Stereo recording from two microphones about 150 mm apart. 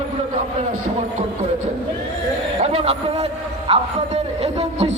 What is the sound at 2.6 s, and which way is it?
A man's voice, 45° right (ahead or behind).